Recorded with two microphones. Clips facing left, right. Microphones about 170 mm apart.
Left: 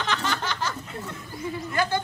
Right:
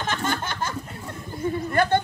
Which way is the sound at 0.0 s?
50° right (ahead or behind).